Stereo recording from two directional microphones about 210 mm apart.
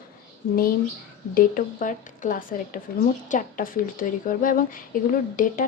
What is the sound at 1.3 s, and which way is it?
A woman's voice, 40° left (ahead or behind).